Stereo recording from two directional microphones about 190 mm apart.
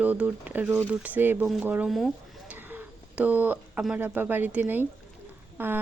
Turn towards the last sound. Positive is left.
turn(degrees=-10)  # may be behind; listen again after turning